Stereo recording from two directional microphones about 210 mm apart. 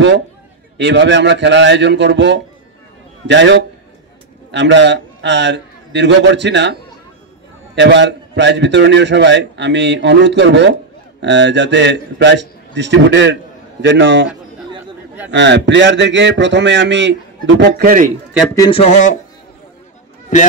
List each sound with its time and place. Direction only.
0.7 s a man's voice: 55° right (ahead or behind)
15.3 s a man's voice: 55° right (ahead or behind); by 18.1 s 40° right (ahead or behind)
18.5 s speech: 15° left (ahead or behind)
18.8 s speech: 35° left (ahead or behind)